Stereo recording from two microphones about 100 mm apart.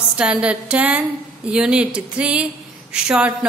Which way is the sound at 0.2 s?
10° right (ahead or behind).